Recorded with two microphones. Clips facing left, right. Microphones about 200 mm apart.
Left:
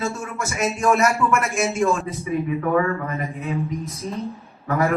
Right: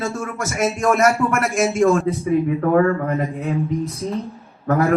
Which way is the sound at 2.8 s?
60° right (ahead or behind).